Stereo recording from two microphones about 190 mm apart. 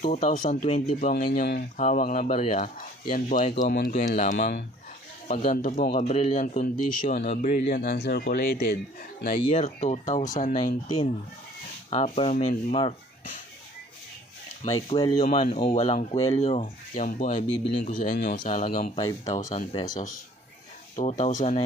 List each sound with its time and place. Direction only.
0.0 s speech: 40° left (ahead or behind)
1.8 s a man's voice: 40° left (ahead or behind); by 8.7 s 55° left (ahead or behind)
9.5 s speech: 40° left (ahead or behind)
11.9 s speech: 30° left (ahead or behind)
14.8 s speech: 25° left (ahead or behind)